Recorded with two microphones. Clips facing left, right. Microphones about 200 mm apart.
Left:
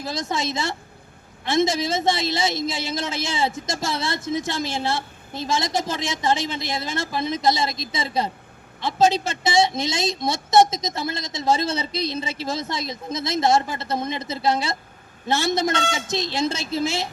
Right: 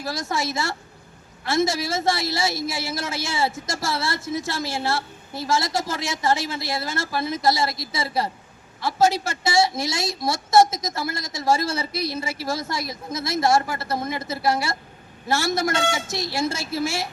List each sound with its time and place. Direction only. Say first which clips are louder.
0.0 s a woman's voice: even; 20° left (ahead or behind)